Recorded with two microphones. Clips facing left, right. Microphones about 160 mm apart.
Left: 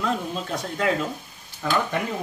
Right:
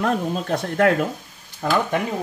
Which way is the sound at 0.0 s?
55° right (ahead or behind).